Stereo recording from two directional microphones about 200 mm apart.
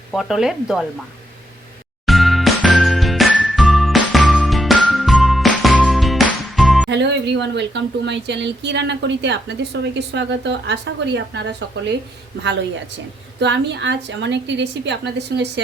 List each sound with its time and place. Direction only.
0.1 s speech: centre (ahead or behind)
2.0 s music: centre (ahead or behind)
6.9 s a woman's voice: 60° right (ahead or behind)
13.4 s a woman's voice: 60° right (ahead or behind)